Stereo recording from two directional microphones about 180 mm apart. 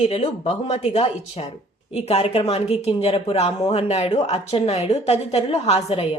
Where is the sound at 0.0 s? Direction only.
35° left (ahead or behind).